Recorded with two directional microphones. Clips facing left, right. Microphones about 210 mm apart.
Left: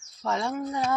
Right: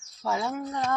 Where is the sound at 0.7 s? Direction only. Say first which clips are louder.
Left 2 dB; 10° left (ahead or behind).